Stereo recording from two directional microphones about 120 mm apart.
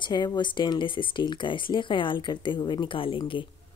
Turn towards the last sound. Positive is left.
turn(degrees=45)  # may be behind; listen again after turning